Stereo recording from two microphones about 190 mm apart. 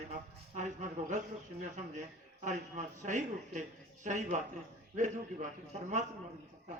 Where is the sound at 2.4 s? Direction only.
40° right (ahead or behind).